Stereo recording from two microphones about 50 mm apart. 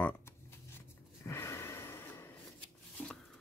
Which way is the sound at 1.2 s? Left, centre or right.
Left.